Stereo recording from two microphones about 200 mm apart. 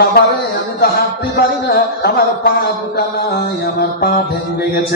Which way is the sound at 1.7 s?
50° left (ahead or behind).